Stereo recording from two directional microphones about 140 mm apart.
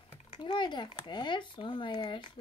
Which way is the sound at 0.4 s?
30° left (ahead or behind).